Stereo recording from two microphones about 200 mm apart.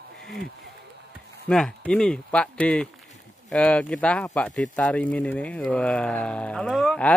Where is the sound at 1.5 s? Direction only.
5° left (ahead or behind).